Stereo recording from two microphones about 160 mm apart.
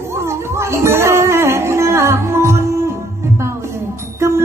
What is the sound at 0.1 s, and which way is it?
Music, 15° right (ahead or behind).